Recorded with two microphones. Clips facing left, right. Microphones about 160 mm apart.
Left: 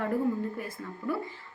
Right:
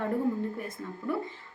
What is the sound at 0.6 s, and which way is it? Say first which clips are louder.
Speech: even; 25° right (ahead or behind).